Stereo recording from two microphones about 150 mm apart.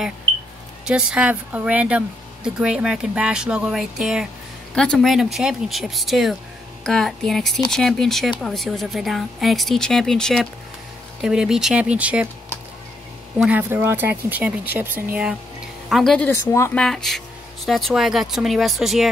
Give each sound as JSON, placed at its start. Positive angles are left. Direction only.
{"t": 0.8, "sound": "speech", "side_deg": -5}
{"t": 13.4, "sound": "speech", "side_deg": -10}
{"t": 15.9, "sound": "speech", "side_deg": 5}
{"t": 16.3, "sound": "speech", "side_deg": 15}
{"t": 16.7, "sound": "speech", "side_deg": 5}